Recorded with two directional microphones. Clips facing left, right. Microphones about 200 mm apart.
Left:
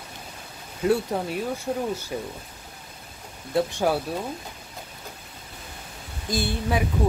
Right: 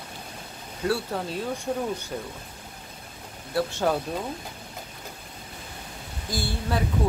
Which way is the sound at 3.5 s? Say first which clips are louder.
Left 2 dB; 20° left (ahead or behind).